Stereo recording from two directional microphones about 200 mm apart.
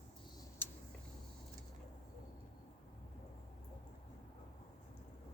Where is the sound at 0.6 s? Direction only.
10° left (ahead or behind).